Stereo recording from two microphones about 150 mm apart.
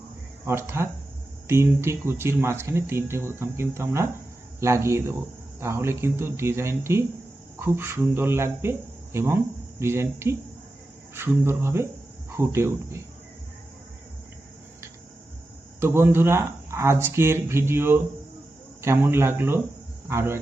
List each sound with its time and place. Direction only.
0.4 s speech: 15° right (ahead or behind)
15.8 s speech: 15° right (ahead or behind)